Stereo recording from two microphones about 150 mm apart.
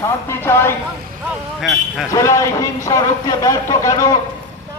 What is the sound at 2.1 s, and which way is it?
Speech, 20° left (ahead or behind).